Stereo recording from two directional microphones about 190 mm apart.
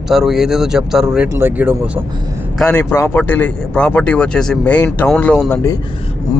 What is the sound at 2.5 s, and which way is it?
Speech, 5° left (ahead or behind).